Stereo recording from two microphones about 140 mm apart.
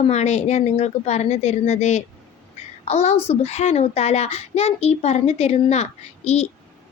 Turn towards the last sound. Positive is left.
turn(degrees=50)  # may be behind; listen again after turning